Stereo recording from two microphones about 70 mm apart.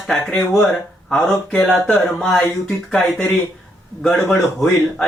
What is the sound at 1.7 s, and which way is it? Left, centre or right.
Speech, centre.